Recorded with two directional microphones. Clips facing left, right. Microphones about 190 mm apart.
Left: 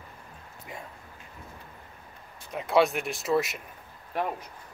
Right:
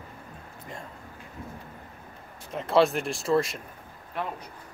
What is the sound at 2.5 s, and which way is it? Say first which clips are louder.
Speech: right 1 dB; centre (ahead or behind).